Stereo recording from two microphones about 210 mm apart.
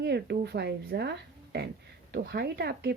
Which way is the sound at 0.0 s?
50° right (ahead or behind).